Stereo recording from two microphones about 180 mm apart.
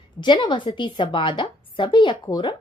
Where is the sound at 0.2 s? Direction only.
25° left (ahead or behind).